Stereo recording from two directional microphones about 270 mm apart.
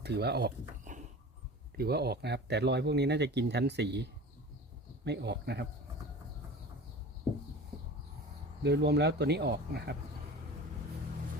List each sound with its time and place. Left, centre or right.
0.0 s speech: right
1.7 s speech: right
5.0 s speech: right
8.6 s speech: right